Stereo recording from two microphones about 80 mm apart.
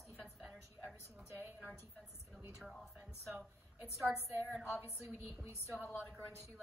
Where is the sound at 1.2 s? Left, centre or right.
Right.